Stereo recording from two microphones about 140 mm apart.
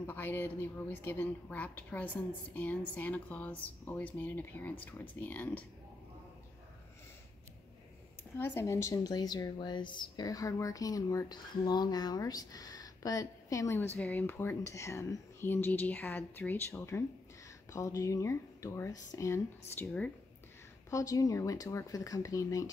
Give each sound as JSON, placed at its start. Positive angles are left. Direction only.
{"t": 0.0, "sound": "a woman's voice", "side_deg": 15}
{"t": 8.4, "sound": "a woman's voice", "side_deg": 20}
{"t": 19.8, "sound": "a woman's voice", "side_deg": 10}
{"t": 20.9, "sound": "speech", "side_deg": 25}